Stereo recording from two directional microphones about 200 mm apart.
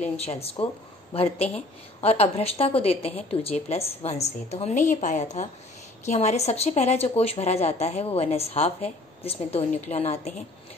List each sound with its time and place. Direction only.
0.0 s a woman's voice: 30° left (ahead or behind)